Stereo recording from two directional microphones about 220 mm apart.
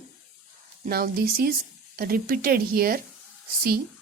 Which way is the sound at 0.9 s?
45° right (ahead or behind).